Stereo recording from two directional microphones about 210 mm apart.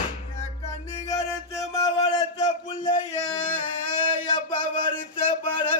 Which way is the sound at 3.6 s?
20° left (ahead or behind).